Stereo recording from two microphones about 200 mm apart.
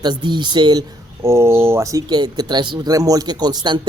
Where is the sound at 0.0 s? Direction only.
20° right (ahead or behind).